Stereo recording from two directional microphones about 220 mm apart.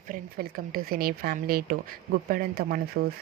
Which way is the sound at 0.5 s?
40° right (ahead or behind).